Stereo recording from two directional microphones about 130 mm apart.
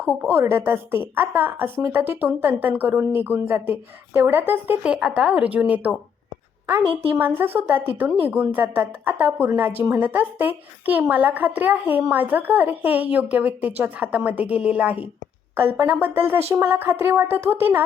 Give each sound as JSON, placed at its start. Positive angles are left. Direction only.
{"t": 0.3, "sound": "a woman's voice", "side_deg": -20}